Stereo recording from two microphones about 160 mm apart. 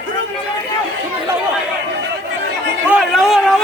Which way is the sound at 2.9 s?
Centre (ahead or behind).